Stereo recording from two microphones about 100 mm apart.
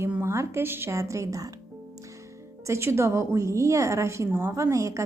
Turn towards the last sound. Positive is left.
turn(degrees=-30)  # may be behind; listen again after turning